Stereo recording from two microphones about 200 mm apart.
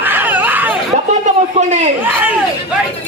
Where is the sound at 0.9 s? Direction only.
35° right (ahead or behind).